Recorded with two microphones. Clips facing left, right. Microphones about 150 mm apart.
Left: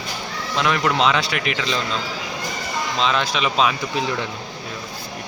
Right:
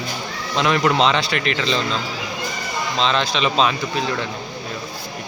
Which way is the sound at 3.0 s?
5° left (ahead or behind).